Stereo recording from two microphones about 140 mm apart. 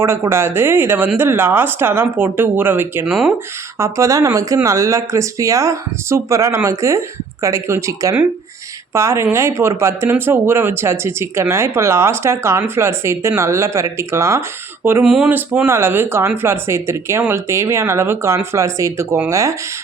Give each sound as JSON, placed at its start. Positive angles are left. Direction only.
{"t": 0.0, "sound": "speech", "side_deg": -15}
{"t": 15.0, "sound": "speech", "side_deg": -5}